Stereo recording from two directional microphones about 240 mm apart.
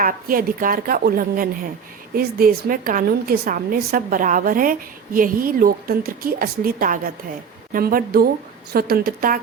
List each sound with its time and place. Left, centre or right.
0.0 s a woman's voice: right